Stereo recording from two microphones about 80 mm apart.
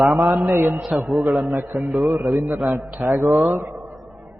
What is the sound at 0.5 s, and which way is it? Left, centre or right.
Speech, right.